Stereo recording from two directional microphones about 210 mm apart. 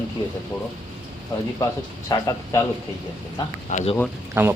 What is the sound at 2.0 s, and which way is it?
Speech, 15° left (ahead or behind).